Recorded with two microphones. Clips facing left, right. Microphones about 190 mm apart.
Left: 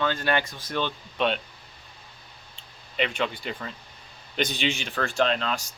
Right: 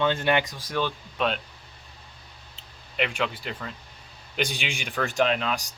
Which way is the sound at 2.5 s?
5° right (ahead or behind).